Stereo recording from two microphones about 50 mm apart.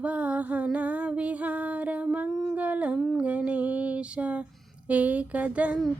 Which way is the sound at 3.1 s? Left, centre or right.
Right.